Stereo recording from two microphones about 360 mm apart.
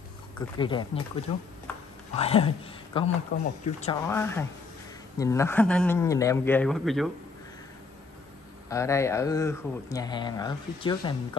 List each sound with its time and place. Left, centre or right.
0.4 s speech: centre
4.1 s a man's voice: centre
8.6 s speech: centre